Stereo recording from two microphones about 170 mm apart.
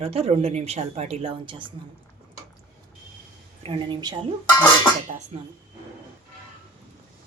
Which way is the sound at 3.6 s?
30° right (ahead or behind).